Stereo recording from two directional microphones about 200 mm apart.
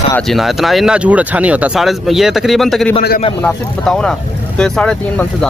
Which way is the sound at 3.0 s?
50° left (ahead or behind).